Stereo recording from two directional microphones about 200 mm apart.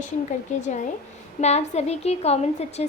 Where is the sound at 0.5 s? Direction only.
40° left (ahead or behind).